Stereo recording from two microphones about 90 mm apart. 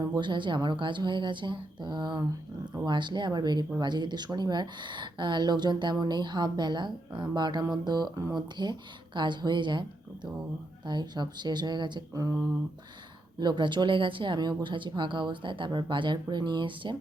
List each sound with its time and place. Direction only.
0.0 s speech: 55° right (ahead or behind)
10.8 s speech: 55° right (ahead or behind)
12.1 s speech: 35° right (ahead or behind)
13.4 s speech: 60° right (ahead or behind)